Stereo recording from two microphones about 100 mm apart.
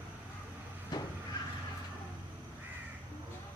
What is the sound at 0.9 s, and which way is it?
Vehicle, 40° left (ahead or behind).